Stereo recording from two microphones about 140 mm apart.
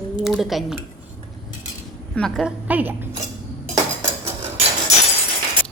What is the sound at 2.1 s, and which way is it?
Speech, 5° left (ahead or behind).